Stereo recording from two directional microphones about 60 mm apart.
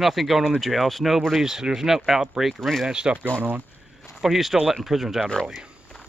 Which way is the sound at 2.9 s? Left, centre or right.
Centre.